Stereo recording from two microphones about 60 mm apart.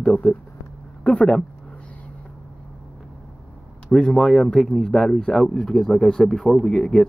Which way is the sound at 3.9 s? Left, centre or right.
Centre.